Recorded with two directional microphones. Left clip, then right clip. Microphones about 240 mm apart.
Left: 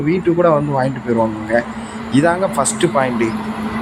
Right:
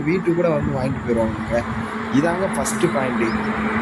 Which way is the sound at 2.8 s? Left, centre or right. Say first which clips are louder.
Left 3 dB; left.